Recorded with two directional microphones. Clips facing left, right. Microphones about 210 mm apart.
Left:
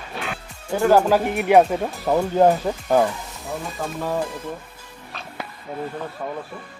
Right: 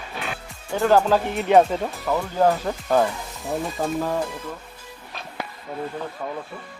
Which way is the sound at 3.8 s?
20° right (ahead or behind).